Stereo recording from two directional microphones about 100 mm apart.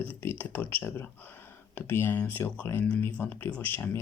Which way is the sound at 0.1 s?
20° left (ahead or behind).